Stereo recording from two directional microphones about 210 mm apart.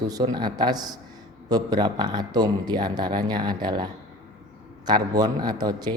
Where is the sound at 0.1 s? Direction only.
20° right (ahead or behind).